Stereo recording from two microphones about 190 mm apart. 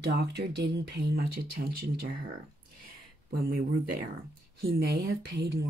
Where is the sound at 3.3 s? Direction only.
55° right (ahead or behind).